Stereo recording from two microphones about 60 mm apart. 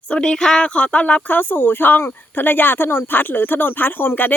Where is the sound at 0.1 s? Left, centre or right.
Centre.